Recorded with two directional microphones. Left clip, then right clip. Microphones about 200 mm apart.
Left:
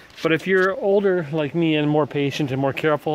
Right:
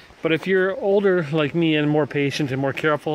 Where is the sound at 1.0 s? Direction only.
20° right (ahead or behind).